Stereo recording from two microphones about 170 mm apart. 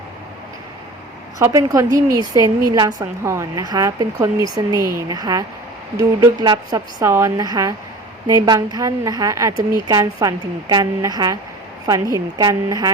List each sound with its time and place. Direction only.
1.4 s a woman's voice: 20° right (ahead or behind)